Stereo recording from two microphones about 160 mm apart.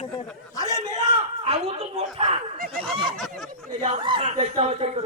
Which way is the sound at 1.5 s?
40° right (ahead or behind).